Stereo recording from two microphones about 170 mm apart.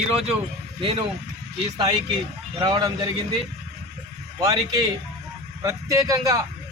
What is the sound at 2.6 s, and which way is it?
Speech, 25° right (ahead or behind).